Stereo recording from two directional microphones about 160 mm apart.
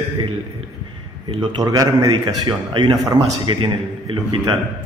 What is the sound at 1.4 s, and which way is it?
A man's voice, 25° right (ahead or behind).